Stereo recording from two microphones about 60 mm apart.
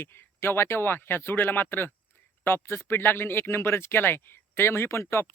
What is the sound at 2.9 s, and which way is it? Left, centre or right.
Speech, left.